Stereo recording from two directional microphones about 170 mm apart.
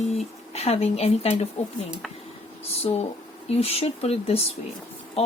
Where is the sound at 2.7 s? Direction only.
35° left (ahead or behind).